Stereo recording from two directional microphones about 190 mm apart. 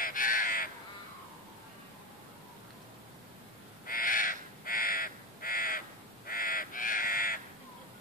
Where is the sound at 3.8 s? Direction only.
45° left (ahead or behind).